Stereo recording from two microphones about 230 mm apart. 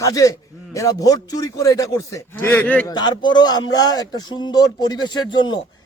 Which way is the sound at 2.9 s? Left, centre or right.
Centre.